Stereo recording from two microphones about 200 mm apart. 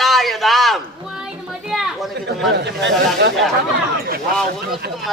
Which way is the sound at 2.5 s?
60° right (ahead or behind).